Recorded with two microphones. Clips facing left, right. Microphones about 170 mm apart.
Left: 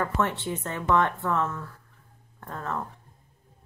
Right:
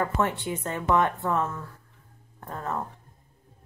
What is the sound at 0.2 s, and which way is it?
A woman's voice, 15° right (ahead or behind).